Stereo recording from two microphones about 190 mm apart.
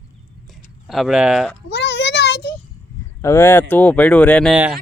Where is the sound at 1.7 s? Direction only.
65° left (ahead or behind).